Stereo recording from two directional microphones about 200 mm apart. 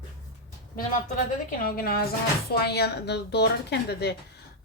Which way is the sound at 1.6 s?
45° left (ahead or behind).